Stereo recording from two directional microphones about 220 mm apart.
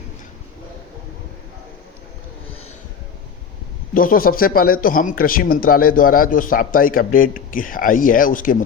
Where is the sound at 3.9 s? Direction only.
40° left (ahead or behind).